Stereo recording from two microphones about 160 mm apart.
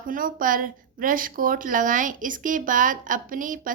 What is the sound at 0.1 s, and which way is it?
A woman's voice, 60° right (ahead or behind).